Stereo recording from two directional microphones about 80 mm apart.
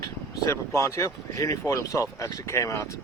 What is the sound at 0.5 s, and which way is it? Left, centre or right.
Speech, left.